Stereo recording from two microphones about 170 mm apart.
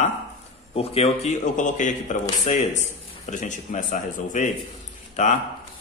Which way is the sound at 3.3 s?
45° left (ahead or behind).